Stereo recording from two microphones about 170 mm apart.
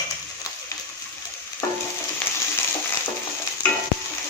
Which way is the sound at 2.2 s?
5° left (ahead or behind).